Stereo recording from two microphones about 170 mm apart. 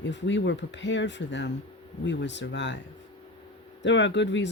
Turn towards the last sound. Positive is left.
turn(degrees=90)